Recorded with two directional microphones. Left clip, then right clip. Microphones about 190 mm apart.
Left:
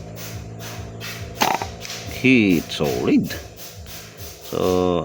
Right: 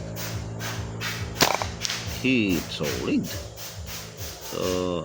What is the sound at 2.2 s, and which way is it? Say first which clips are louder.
Speech: left 8 dB; 50° left (ahead or behind).